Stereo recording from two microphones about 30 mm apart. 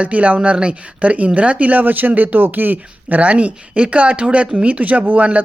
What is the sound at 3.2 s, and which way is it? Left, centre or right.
A man's voice, right.